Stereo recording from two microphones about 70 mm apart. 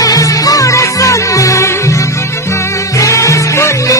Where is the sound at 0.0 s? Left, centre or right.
Left.